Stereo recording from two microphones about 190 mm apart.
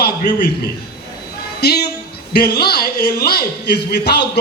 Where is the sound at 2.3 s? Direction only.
55° left (ahead or behind).